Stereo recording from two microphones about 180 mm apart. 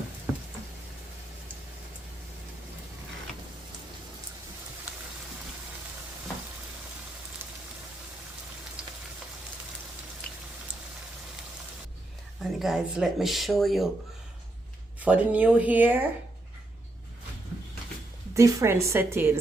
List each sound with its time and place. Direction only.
12.4 s speech: centre (ahead or behind)
15.0 s speech: 10° right (ahead or behind)
18.3 s speech: 15° right (ahead or behind)